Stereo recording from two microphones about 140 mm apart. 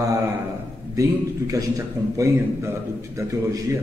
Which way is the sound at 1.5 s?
25° right (ahead or behind).